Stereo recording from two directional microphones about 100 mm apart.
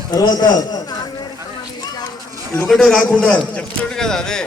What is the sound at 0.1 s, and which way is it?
Speech, 45° left (ahead or behind).